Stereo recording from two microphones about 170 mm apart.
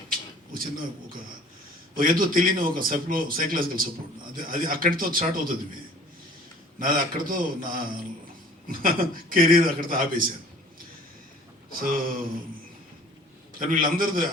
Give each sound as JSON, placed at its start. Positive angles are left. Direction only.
{"t": 0.1, "sound": "a sound", "side_deg": -55}
{"t": 2.0, "sound": "a man's voice", "side_deg": -55}
{"t": 6.7, "sound": "a man's voice", "side_deg": -55}
{"t": 11.7, "sound": "a man's voice", "side_deg": -55}
{"t": 13.6, "sound": "a man's voice", "side_deg": -55}